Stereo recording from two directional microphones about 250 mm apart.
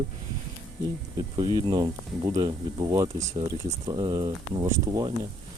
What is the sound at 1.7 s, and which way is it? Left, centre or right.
Speech, centre.